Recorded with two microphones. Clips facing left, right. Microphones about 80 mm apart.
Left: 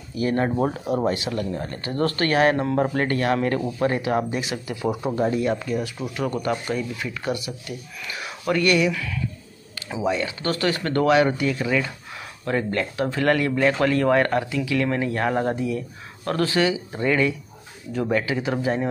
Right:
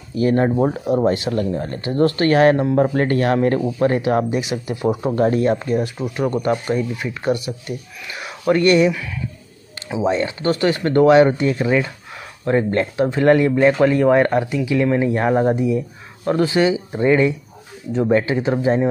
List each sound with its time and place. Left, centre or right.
0.1 s speech: right
2.5 s speech: centre
2.9 s speech: right
5.1 s speech: right
5.9 s speech: right